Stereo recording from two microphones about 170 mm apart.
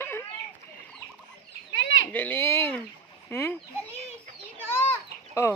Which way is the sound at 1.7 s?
90° left.